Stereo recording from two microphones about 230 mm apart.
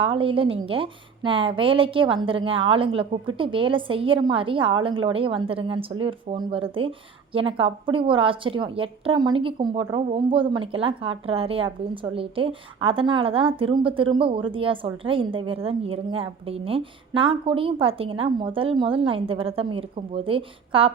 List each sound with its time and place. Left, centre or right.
0.0 s a woman's voice: right